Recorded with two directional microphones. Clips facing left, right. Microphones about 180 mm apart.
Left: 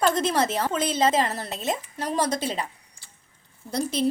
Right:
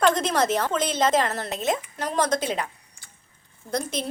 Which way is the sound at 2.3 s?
30° left (ahead or behind).